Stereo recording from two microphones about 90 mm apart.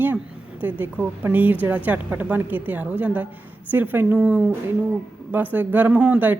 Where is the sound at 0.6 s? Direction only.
20° right (ahead or behind).